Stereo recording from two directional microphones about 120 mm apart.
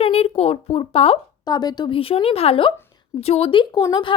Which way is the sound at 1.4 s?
35° left (ahead or behind).